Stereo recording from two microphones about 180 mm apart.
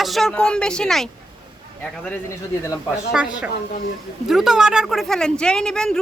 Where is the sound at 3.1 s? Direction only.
5° right (ahead or behind).